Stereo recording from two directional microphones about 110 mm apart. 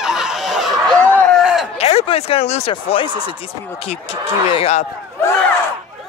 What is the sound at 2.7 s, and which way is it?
Speech, 50° left (ahead or behind).